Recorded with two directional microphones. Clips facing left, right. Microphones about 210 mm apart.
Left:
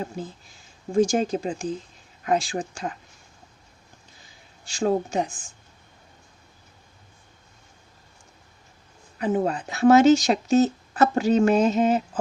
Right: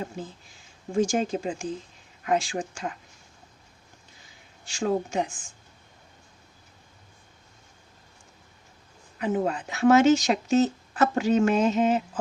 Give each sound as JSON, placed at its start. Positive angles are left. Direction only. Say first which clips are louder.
{"t": 1.0, "sound": "speech", "louder": "left 2 dB", "side_deg": 40}
{"t": 4.6, "sound": "speech", "louder": "left 3 dB", "side_deg": 35}
{"t": 9.1, "sound": "speech", "louder": "left 2 dB", "side_deg": 35}